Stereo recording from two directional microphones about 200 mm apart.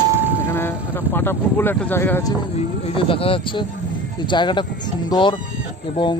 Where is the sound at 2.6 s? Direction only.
25° left (ahead or behind).